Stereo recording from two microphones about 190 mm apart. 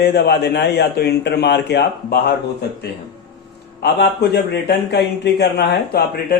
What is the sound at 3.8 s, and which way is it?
A man's voice, 60° left (ahead or behind).